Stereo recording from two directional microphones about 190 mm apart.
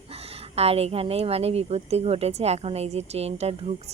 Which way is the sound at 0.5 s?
30° right (ahead or behind).